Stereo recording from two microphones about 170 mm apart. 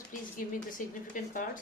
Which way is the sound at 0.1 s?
50° left (ahead or behind).